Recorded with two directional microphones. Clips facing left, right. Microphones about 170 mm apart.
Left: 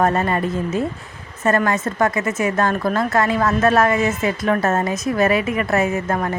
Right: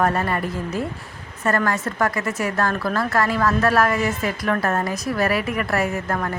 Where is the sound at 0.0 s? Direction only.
20° left (ahead or behind).